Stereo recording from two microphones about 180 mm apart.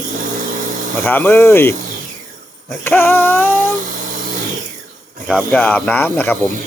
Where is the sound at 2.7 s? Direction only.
10° left (ahead or behind).